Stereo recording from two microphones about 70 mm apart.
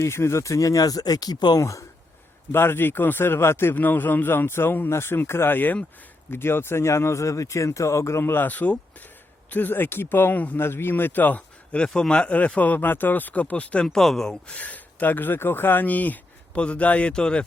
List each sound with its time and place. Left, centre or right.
0.0 s speech: left
1.5 s speech: left
2.5 s speech: left
10.6 s speech: left
13.8 s speech: centre